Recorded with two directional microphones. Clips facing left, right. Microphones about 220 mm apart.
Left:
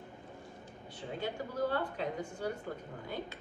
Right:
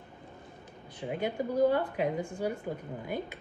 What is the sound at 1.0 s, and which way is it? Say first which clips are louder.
Speech: right 6 dB; 15° right (ahead or behind).